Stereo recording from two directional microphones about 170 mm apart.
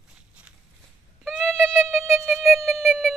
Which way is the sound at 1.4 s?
5° left (ahead or behind).